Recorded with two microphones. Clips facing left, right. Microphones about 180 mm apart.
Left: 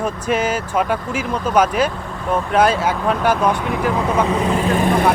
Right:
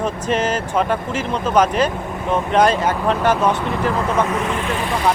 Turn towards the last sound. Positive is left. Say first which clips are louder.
# left 5 dB
turn(degrees=50)  # may be behind; listen again after turning